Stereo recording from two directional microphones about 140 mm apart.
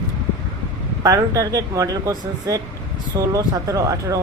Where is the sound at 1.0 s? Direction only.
25° right (ahead or behind).